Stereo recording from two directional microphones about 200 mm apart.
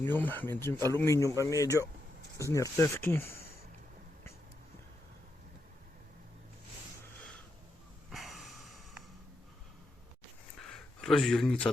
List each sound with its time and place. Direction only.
0.0 s speech: 10° left (ahead or behind)
8.1 s snort: centre (ahead or behind)
10.7 s speech: 5° left (ahead or behind)